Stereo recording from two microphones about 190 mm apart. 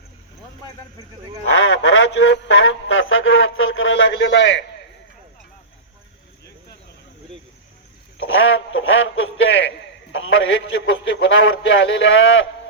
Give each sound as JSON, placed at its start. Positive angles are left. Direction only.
{"t": 1.5, "sound": "a man's voice", "side_deg": 90}
{"t": 8.2, "sound": "a man's voice", "side_deg": 90}